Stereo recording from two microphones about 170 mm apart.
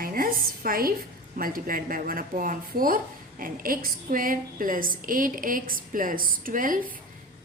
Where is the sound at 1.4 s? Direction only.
55° right (ahead or behind).